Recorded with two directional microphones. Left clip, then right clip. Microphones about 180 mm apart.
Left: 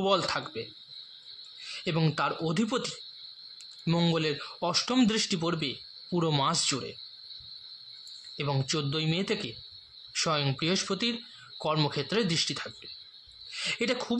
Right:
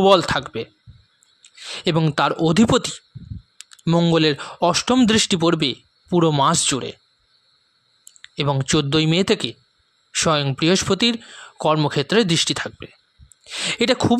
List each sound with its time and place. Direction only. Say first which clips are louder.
0.0 s speech: right 12 dB; 50° right (ahead or behind)
2.1 s speech: right 12 dB; 55° right (ahead or behind)
3.8 s speech: right 10 dB; 40° right (ahead or behind)
4.1 s speech: right 12 dB; 55° right (ahead or behind)
8.4 s speech: right 11 dB; 50° right (ahead or behind)